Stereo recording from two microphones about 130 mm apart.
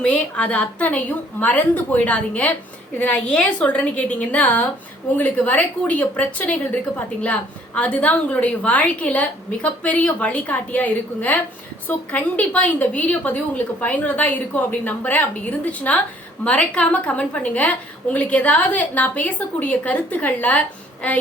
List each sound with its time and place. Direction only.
0.0 s a woman's voice: 10° left (ahead or behind)
7.8 s a woman's voice: 10° left (ahead or behind)